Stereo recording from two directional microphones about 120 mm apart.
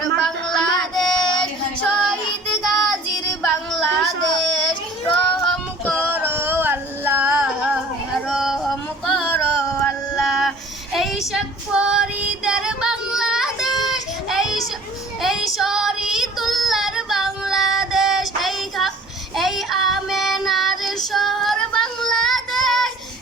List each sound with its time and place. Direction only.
0.0 s child singing: 5° left (ahead or behind)
6.1 s music: 15° right (ahead or behind); by 10.5 s centre (ahead or behind)
10.9 s a sound: centre (ahead or behind)
11.3 s female singing: 5° right (ahead or behind)
19.4 s child singing: centre (ahead or behind)